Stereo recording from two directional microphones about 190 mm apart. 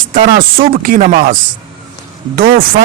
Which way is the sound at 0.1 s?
50° right (ahead or behind).